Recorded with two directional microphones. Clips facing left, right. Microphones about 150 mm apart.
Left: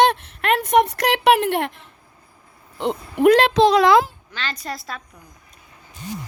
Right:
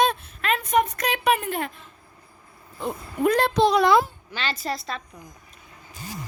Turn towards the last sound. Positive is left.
turn(degrees=0)  # may be behind; listen again after turning